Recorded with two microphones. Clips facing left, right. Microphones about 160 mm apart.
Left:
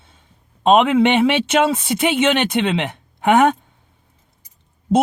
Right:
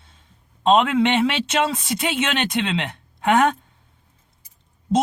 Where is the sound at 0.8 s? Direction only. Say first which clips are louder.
Left 6 dB; 60° left (ahead or behind).